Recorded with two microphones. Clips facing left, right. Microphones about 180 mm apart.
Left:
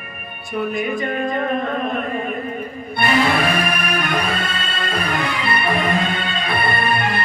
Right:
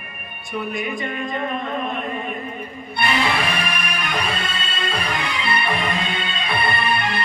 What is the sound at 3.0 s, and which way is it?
Music, 45° left (ahead or behind).